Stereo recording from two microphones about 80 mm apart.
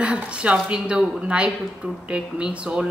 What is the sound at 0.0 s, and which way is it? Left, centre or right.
A woman's voice, centre.